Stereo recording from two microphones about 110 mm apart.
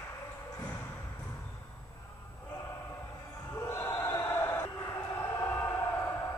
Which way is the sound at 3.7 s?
30° left (ahead or behind).